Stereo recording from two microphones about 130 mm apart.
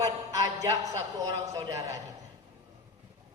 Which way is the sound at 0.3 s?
25° right (ahead or behind).